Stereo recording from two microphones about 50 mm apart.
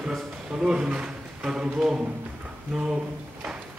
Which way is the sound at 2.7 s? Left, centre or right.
Centre.